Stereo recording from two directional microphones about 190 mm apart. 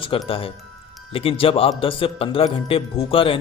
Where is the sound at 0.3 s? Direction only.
30° left (ahead or behind).